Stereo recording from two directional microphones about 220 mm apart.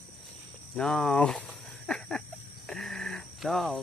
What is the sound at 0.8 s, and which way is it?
Speech, centre (ahead or behind).